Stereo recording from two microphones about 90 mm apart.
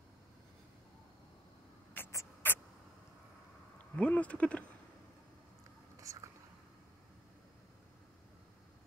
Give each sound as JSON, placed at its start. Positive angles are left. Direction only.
{"t": 2.0, "sound": "rodents", "side_deg": 20}
{"t": 2.4, "sound": "a sound", "side_deg": 25}
{"t": 3.7, "sound": "speech", "side_deg": 15}
{"t": 5.9, "sound": "whispering", "side_deg": -35}